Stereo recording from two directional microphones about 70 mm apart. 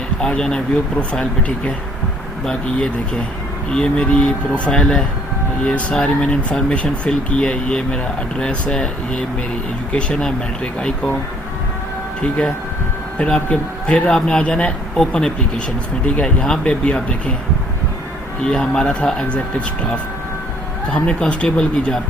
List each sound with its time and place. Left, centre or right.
0.2 s speech: centre
13.1 s speech: centre
18.4 s speech: centre
20.9 s speech: centre